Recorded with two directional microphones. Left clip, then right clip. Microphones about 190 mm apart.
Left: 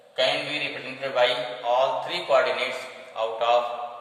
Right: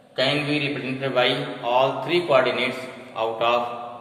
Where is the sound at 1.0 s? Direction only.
15° right (ahead or behind).